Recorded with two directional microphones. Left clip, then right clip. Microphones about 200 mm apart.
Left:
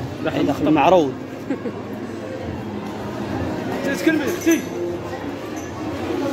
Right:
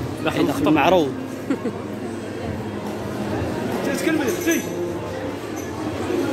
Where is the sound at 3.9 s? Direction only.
50° left (ahead or behind).